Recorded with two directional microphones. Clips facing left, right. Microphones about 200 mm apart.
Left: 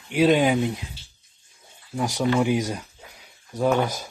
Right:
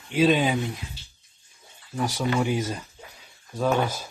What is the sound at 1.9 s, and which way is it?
Speech, 15° left (ahead or behind).